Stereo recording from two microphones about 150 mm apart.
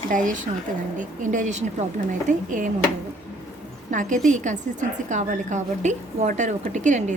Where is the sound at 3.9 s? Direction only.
60° right (ahead or behind).